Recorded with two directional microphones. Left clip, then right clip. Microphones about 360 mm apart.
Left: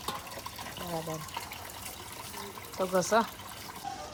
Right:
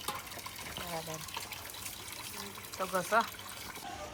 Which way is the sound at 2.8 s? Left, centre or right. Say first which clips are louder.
Left 4 dB; centre.